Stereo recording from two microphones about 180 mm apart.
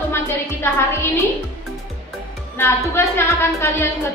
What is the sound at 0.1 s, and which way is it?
A woman's voice, 15° left (ahead or behind).